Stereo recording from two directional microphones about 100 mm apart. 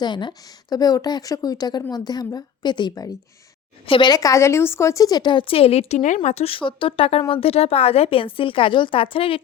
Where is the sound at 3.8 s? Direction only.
65° left (ahead or behind).